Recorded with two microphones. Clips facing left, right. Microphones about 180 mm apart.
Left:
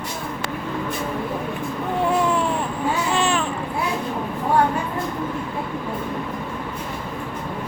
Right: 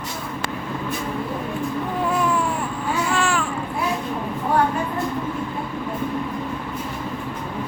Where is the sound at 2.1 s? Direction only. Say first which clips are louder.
Left 2 dB; 25° left (ahead or behind).